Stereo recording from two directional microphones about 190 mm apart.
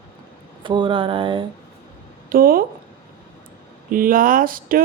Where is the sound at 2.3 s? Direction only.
50° right (ahead or behind).